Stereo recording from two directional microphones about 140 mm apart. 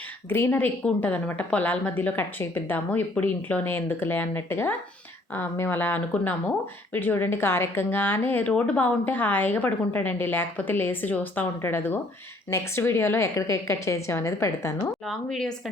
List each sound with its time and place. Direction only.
0.3 s a woman's voice: 15° left (ahead or behind)
15.0 s speech: centre (ahead or behind)